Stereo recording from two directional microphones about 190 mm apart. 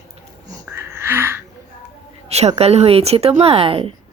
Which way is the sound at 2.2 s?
35° right (ahead or behind).